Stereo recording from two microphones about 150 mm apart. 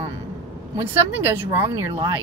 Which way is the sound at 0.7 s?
15° right (ahead or behind).